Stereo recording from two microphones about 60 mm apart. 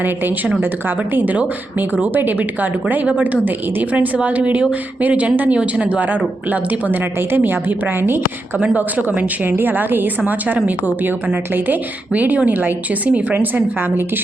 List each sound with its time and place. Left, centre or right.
0.6 s a woman's voice: right
8.5 s a woman's voice: right